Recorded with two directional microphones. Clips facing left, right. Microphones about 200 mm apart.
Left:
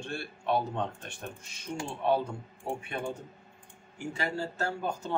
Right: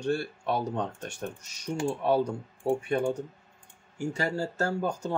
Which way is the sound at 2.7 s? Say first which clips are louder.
Right 8 dB; 45° right (ahead or behind).